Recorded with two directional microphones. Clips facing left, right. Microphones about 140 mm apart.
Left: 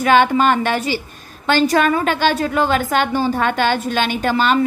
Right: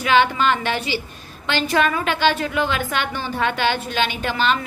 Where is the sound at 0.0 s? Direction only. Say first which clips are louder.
Left 4 dB; 45° left (ahead or behind).